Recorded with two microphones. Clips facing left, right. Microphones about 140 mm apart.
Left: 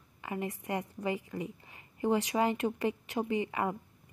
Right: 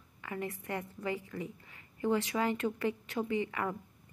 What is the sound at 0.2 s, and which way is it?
A woman's voice, 20° left (ahead or behind).